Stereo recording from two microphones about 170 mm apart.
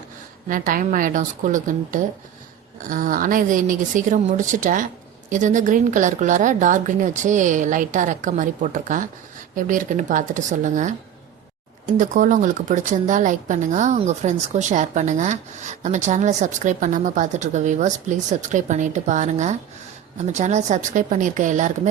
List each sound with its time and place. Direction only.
0.4 s a woman's voice: 50° right (ahead or behind)